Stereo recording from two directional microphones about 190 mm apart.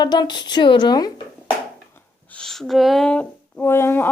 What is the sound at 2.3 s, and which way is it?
Speech, centre (ahead or behind).